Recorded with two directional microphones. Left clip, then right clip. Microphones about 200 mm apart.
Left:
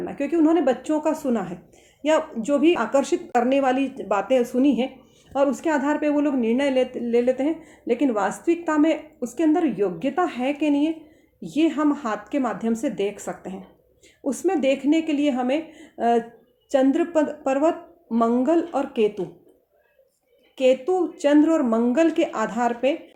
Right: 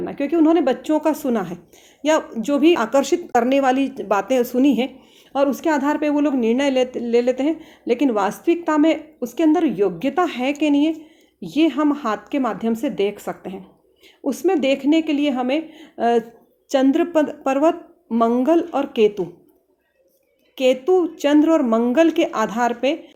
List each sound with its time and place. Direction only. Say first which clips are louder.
0.0 s a woman's voice: right 3 dB; 30° right (ahead or behind)
20.6 s a woman's voice: right 3 dB; 35° right (ahead or behind)